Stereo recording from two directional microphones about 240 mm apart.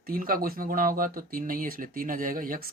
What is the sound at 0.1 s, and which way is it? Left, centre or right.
Speech, right.